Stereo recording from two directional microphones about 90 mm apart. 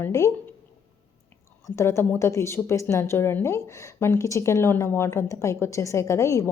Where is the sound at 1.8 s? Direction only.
30° left (ahead or behind).